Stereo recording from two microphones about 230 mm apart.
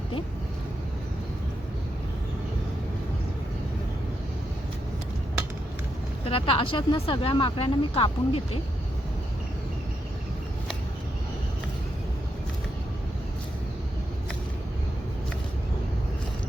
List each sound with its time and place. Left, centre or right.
6.2 s speech: left